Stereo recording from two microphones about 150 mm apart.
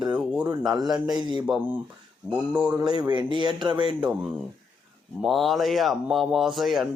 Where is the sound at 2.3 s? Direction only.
10° right (ahead or behind).